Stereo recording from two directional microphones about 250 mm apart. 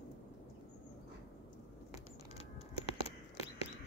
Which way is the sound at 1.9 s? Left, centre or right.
Left.